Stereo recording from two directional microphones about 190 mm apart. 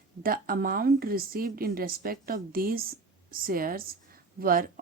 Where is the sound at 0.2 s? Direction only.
50° right (ahead or behind).